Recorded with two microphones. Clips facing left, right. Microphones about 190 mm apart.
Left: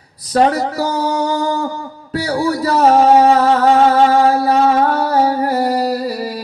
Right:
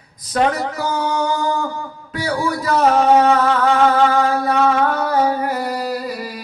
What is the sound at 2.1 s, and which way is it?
Music, 35° left (ahead or behind).